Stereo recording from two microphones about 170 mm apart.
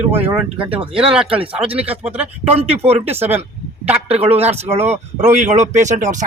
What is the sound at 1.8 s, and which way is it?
Speech, 10° right (ahead or behind).